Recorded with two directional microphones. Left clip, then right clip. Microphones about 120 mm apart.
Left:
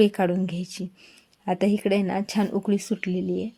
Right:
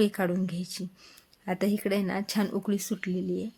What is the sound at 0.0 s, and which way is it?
Speech, 30° left (ahead or behind).